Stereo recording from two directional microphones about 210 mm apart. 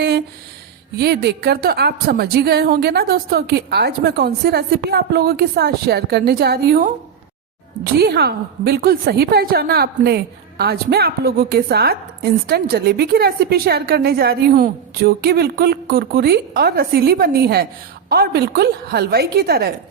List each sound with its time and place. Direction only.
0.9 s a woman's voice: 50° right (ahead or behind)
7.9 s a woman's voice: 50° right (ahead or behind)